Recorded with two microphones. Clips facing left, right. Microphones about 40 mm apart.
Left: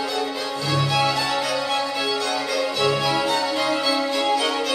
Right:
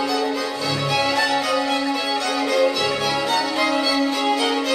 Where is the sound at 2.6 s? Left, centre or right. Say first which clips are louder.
Right 1 dB; right.